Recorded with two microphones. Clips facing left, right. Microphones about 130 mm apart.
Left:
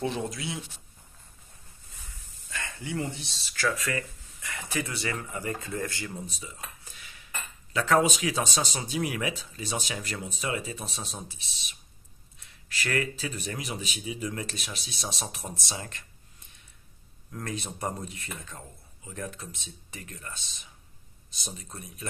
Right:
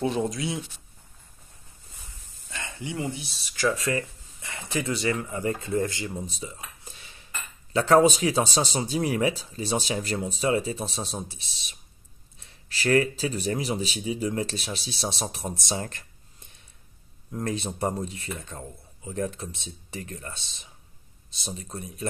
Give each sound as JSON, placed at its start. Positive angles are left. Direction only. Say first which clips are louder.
{"t": 0.0, "sound": "speech", "louder": "right 5 dB", "side_deg": -25}
{"t": 2.5, "sound": "speech", "louder": "even", "side_deg": -20}
{"t": 3.6, "sound": "speech", "louder": "right 4 dB", "side_deg": -25}
{"t": 17.3, "sound": "speech", "louder": "right 6 dB", "side_deg": -30}